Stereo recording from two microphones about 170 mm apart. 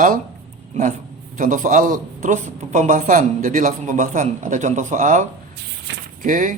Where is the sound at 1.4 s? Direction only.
50° right (ahead or behind).